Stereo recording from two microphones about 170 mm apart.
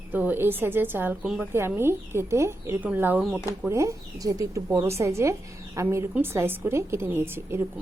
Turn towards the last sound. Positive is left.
turn(degrees=-15)  # may be behind; listen again after turning